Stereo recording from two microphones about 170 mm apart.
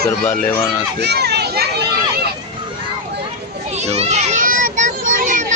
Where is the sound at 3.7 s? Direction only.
40° right (ahead or behind).